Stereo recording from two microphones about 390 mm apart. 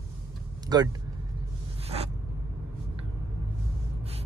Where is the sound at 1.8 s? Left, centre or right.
Centre.